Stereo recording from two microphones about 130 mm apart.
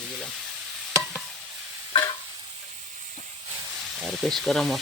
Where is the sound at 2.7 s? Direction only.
70° right (ahead or behind).